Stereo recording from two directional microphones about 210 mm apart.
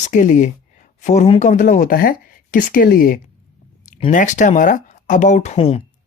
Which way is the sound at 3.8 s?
35° left (ahead or behind).